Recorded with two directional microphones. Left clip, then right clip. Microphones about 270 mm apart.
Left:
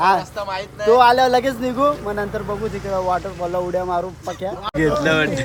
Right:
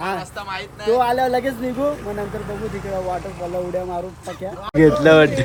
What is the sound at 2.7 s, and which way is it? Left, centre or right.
Speech, right.